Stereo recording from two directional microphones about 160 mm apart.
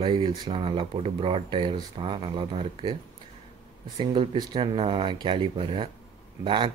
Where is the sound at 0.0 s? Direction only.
30° right (ahead or behind).